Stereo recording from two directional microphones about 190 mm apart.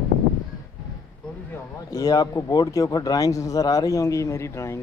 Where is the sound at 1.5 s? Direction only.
15° left (ahead or behind).